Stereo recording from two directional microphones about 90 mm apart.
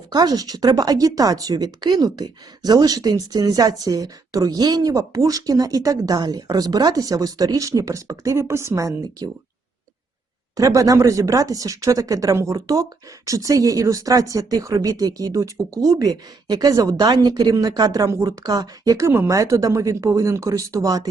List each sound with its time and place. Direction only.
0.1 s speech: 45° right (ahead or behind)
10.6 s speech: 40° right (ahead or behind)